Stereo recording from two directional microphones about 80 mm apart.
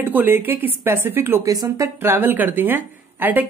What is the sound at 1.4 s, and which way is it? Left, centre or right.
Speech, right.